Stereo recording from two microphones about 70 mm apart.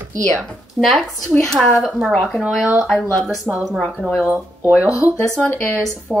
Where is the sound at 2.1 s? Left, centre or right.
Centre.